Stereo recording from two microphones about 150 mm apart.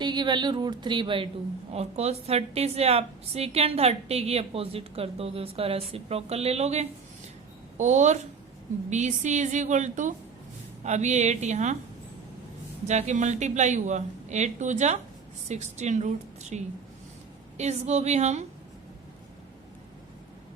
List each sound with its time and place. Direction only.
0.0 s a woman's voice: 30° right (ahead or behind); by 11.8 s 50° right (ahead or behind)
12.9 s a woman's voice: 50° right (ahead or behind)